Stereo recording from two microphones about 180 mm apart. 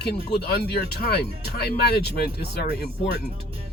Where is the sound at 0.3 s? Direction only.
60° left (ahead or behind).